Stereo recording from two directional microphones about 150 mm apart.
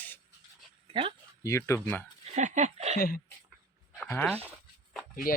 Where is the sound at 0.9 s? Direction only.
35° right (ahead or behind).